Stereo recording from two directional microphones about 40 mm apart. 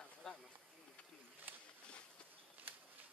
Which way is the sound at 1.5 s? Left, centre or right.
Right.